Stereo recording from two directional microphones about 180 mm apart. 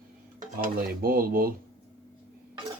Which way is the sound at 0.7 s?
55° right (ahead or behind).